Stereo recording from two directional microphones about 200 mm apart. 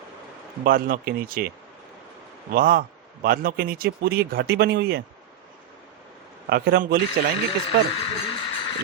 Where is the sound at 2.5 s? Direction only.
45° right (ahead or behind).